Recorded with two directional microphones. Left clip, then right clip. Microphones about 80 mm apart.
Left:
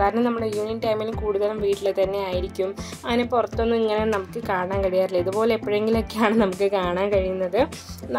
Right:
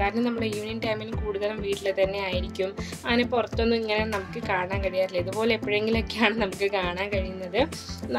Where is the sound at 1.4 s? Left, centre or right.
Left.